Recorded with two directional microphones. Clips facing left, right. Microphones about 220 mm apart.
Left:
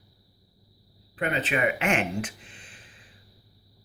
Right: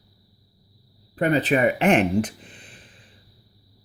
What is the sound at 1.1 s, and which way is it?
Speech, 35° right (ahead or behind).